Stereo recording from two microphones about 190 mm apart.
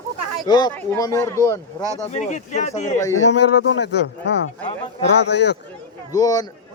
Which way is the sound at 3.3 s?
65° left (ahead or behind).